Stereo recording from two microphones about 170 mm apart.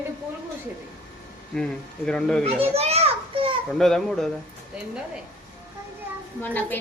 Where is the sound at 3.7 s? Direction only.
Centre (ahead or behind).